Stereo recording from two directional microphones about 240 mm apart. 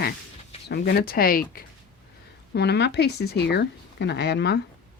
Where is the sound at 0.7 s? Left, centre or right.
Left.